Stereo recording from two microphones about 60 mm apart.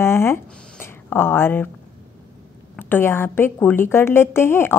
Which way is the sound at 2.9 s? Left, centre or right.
Left.